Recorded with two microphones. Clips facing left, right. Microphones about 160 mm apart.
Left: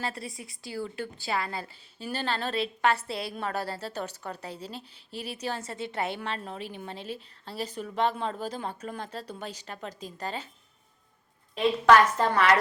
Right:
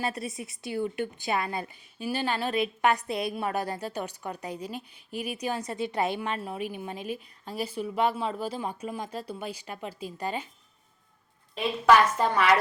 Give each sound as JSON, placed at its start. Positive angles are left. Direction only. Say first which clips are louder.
{"t": 0.0, "sound": "a woman's voice", "louder": "right 3 dB", "side_deg": -20}
{"t": 11.5, "sound": "a woman's voice", "louder": "left 1 dB", "side_deg": -10}